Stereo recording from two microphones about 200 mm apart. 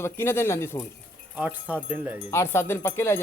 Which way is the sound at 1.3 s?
10° right (ahead or behind).